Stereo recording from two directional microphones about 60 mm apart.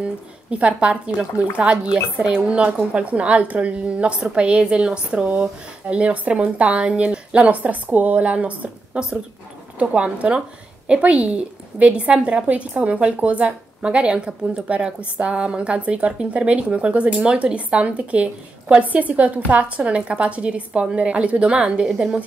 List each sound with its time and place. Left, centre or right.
0.0 s a woman's voice: right